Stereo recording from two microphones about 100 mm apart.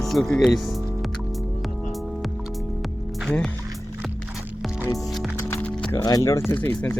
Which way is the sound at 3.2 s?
5° left (ahead or behind).